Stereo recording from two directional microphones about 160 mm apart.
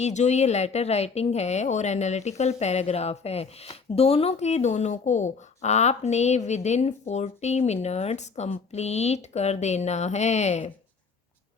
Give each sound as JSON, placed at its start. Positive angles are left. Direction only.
{"t": 0.0, "sound": "speech", "side_deg": 45}